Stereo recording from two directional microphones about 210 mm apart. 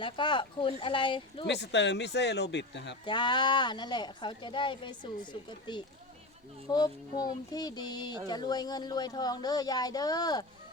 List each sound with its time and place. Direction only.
0.0 s speech: 20° left (ahead or behind)
1.5 s speech: 55° left (ahead or behind)
3.1 s speech: 20° left (ahead or behind)